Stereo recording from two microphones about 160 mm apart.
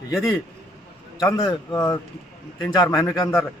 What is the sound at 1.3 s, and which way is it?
A man's voice, 25° left (ahead or behind).